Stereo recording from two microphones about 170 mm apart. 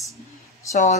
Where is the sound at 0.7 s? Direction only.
45° left (ahead or behind).